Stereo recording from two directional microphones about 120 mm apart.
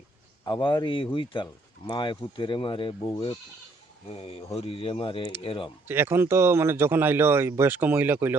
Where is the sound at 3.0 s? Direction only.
35° left (ahead or behind).